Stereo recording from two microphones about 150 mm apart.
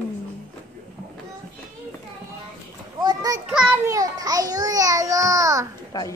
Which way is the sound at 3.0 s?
25° right (ahead or behind).